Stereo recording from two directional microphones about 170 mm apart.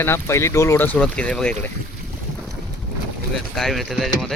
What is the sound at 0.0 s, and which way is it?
Speech, 15° left (ahead or behind).